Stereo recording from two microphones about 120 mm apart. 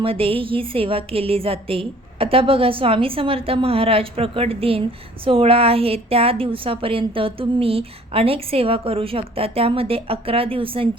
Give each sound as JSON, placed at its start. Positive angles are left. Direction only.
{"t": 0.0, "sound": "a woman's voice", "side_deg": -50}